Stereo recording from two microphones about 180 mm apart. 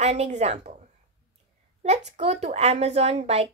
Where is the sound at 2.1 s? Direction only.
35° right (ahead or behind).